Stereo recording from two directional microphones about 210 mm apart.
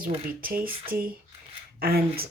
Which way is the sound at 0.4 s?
45° right (ahead or behind).